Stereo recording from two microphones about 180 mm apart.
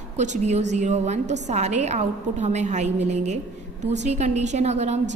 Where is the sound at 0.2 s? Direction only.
40° right (ahead or behind).